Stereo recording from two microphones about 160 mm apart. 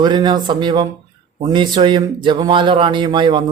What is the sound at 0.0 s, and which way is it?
A man's voice, 25° right (ahead or behind).